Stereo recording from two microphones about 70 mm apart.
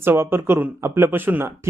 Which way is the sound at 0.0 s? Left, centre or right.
Right.